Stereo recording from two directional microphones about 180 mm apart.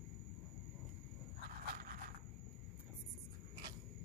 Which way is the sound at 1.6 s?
55° right (ahead or behind).